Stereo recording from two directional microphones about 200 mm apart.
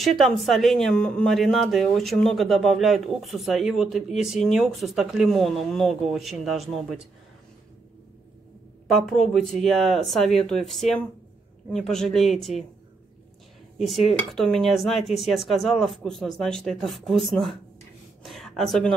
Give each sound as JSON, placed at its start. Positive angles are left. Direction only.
{"t": 0.0, "sound": "speech", "side_deg": 0}
{"t": 8.8, "sound": "speech", "side_deg": 0}
{"t": 13.7, "sound": "speech", "side_deg": 0}